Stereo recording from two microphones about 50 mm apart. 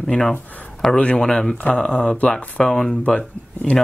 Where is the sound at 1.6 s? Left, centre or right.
Left.